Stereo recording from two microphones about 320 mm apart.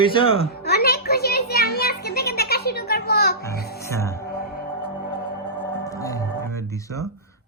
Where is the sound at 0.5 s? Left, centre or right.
Left.